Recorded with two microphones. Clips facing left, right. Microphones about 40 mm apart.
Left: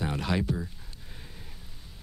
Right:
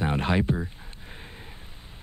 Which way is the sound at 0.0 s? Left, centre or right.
Right.